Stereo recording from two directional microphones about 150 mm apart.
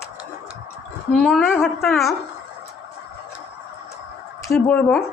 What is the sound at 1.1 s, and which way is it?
Speech, centre (ahead or behind).